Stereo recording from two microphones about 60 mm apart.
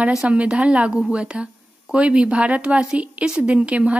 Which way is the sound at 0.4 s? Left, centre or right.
Centre.